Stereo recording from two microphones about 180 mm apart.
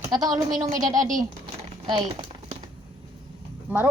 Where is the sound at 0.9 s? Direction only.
45° right (ahead or behind).